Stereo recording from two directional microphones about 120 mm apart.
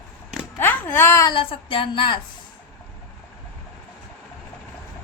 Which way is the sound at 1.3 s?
45° left (ahead or behind).